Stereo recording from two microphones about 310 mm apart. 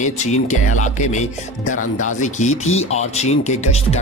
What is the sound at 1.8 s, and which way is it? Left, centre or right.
Speech, left.